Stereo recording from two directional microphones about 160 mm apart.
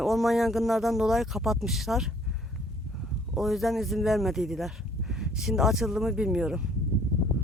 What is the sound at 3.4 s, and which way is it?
Speech, centre (ahead or behind).